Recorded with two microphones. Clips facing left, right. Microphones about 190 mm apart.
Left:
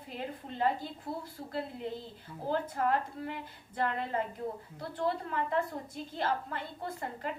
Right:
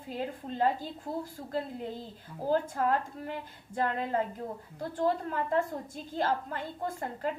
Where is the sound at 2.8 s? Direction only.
45° right (ahead or behind).